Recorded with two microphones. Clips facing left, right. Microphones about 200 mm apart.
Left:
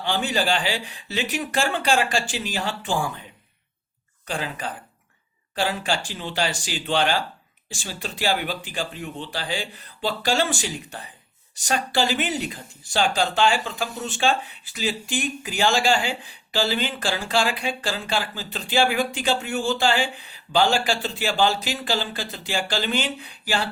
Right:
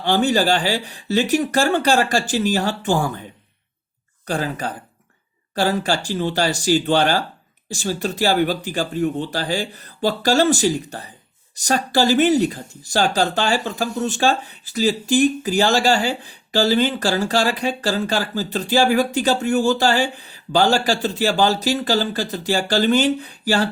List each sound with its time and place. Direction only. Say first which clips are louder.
0.0 s speech: right 7 dB; 40° right (ahead or behind)
4.3 s speech: right 6 dB; 40° right (ahead or behind)